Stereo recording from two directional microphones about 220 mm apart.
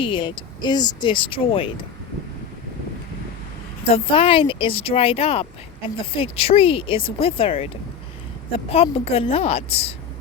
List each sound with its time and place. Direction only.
0.0 s speech: 20° left (ahead or behind)
3.8 s speech: 25° left (ahead or behind)